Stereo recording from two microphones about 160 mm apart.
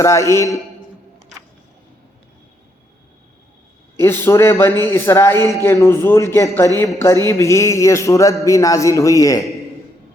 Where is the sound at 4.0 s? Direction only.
15° left (ahead or behind).